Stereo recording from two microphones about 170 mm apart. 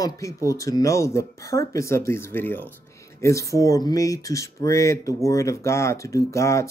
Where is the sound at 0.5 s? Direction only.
20° left (ahead or behind).